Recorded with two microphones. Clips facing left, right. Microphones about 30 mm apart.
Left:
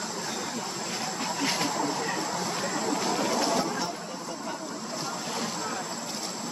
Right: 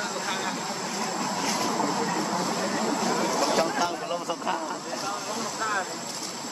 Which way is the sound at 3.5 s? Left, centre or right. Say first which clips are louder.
Right 4 dB; right.